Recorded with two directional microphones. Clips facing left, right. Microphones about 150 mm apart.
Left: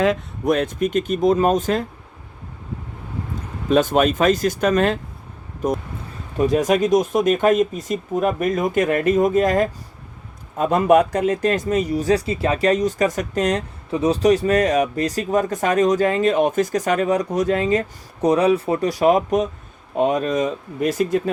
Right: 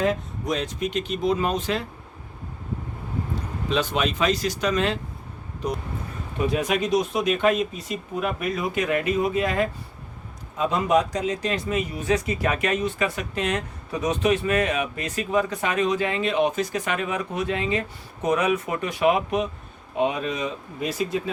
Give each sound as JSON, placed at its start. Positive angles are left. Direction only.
{"t": 0.0, "sound": "speech", "side_deg": 75}
{"t": 3.7, "sound": "speech", "side_deg": 50}